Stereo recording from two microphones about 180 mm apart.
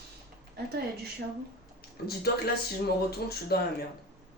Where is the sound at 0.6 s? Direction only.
60° right (ahead or behind).